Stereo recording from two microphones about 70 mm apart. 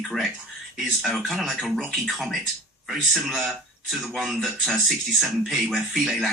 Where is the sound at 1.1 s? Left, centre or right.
Centre.